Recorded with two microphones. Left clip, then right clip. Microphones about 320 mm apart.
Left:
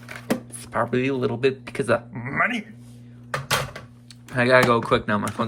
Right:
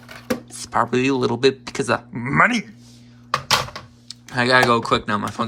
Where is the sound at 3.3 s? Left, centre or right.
Right.